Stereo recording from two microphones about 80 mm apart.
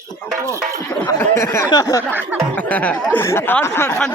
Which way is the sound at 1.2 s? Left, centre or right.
Left.